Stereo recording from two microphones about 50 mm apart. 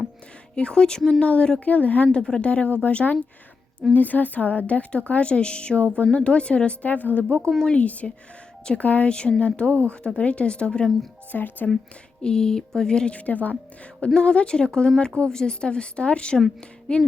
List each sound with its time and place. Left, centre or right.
0.5 s a woman's voice: centre
2.1 s a woman's voice: centre
11.3 s speech: left
12.2 s speech: centre
13.1 s speech: left
14.1 s a woman's voice: centre